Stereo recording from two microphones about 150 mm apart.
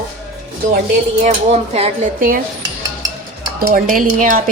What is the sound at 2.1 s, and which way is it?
Speech, 65° right (ahead or behind).